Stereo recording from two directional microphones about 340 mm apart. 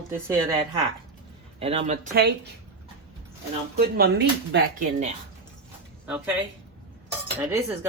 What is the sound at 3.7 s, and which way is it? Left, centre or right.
Speech, right.